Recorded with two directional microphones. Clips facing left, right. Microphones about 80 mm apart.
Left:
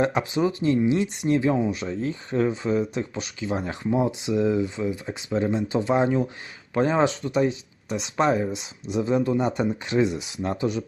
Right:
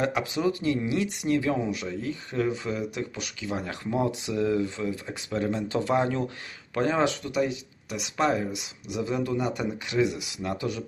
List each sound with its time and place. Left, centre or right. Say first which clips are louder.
0.0 s speech: left 3 dB; left